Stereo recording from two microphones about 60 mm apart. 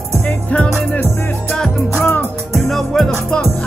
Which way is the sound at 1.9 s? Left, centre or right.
Left.